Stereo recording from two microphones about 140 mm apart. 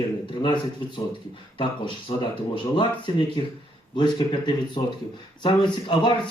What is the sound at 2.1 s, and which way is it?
Speech, 45° left (ahead or behind).